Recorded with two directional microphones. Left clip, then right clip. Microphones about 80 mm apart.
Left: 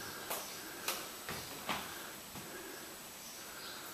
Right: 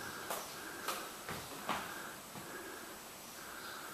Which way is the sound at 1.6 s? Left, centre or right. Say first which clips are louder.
Right 1 dB; centre.